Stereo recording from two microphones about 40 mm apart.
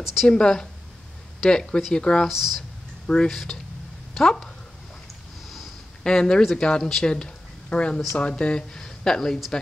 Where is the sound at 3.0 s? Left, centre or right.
Centre.